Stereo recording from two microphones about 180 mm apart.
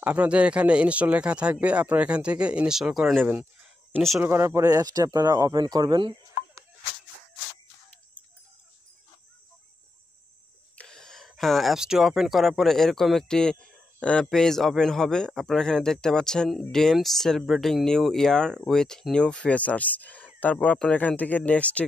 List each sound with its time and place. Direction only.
0.0 s speech: 5° right (ahead or behind)
4.2 s speech: 15° right (ahead or behind)
10.8 s speech: 5° left (ahead or behind)